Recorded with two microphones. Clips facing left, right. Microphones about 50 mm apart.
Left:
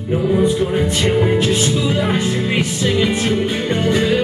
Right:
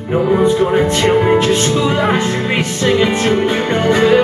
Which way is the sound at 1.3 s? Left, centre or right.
Centre.